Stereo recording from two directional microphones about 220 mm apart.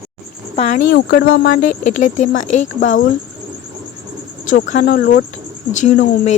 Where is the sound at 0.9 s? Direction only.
45° left (ahead or behind).